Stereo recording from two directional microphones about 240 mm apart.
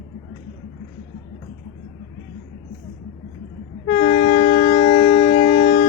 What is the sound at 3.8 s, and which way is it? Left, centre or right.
Train, left.